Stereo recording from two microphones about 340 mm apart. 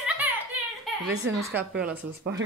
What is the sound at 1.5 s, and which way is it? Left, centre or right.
Speech, centre.